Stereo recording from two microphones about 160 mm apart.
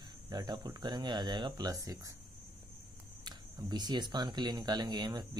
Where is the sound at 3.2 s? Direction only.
25° right (ahead or behind).